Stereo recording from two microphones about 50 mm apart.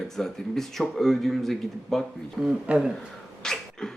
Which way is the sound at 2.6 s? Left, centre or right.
Right.